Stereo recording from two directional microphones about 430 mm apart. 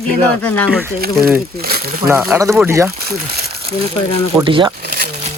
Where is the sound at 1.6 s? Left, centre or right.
Right.